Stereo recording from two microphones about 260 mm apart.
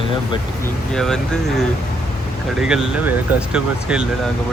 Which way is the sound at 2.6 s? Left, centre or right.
Centre.